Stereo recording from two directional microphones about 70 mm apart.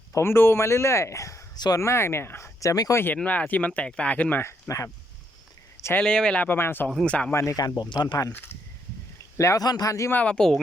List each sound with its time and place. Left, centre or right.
0.1 s speech: left
2.6 s a man's voice: left
2.9 s speech: left
4.7 s speech: left
6.0 s speech: centre
6.4 s speech: left
7.0 s speech: centre
7.5 s speech: left
8.3 s speech: left
9.6 s a man's voice: left
10.1 s speech: centre